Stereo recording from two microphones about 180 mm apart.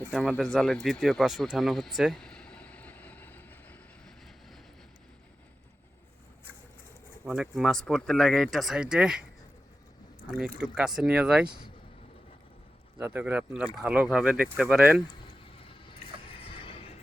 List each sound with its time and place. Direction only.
0.2 s a sound: 5° left (ahead or behind)
7.3 s speech: 5° right (ahead or behind)
10.3 s speech: 5° right (ahead or behind)
13.0 s speech: 10° right (ahead or behind)
15.3 s a sound: 30° left (ahead or behind)
16.6 s music: 30° left (ahead or behind)